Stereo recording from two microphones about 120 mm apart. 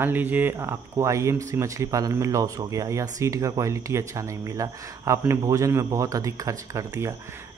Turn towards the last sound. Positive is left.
turn(degrees=-25)  # may be behind; listen again after turning